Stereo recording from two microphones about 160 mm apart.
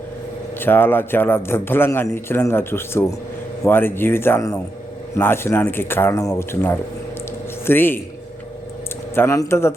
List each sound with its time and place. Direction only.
0.6 s a man's voice: 15° left (ahead or behind)
9.1 s a man's voice: 15° left (ahead or behind)